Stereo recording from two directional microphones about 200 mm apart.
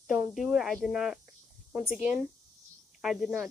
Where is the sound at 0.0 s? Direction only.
Centre (ahead or behind).